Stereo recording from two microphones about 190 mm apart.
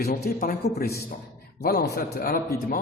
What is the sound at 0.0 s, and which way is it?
A man's voice, 50° left (ahead or behind).